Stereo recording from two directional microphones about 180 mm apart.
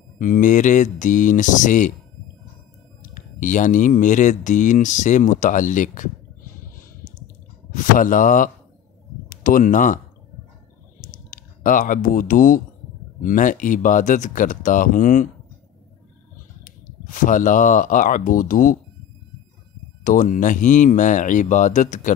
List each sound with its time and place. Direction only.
0.2 s speech: 45° left (ahead or behind)
3.0 s speech: 45° left (ahead or behind)
7.7 s speech: 50° left (ahead or behind)
11.0 s a sound: 50° left (ahead or behind)
13.2 s speech: 45° left (ahead or behind)
16.6 s speech: 45° left (ahead or behind)
20.0 s speech: 50° left (ahead or behind)